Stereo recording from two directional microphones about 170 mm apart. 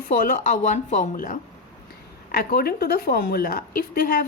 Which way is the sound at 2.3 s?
65° left (ahead or behind).